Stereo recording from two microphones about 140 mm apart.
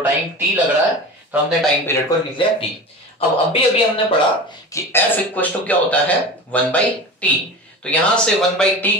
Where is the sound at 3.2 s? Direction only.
45° left (ahead or behind).